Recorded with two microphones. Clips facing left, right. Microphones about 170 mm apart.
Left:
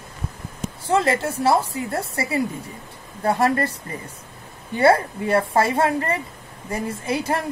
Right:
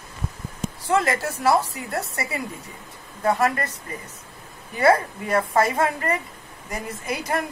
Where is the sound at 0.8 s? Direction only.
30° left (ahead or behind).